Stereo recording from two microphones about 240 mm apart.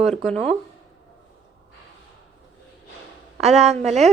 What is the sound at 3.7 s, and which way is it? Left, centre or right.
Speech, right.